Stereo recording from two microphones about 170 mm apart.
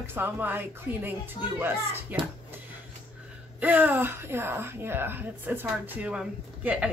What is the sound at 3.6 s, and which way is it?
A woman's voice, 10° right (ahead or behind).